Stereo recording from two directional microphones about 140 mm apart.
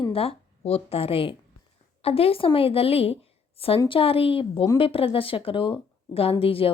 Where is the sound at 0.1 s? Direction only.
45° left (ahead or behind).